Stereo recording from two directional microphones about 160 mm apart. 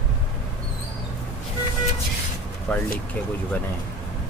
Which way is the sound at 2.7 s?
10° left (ahead or behind).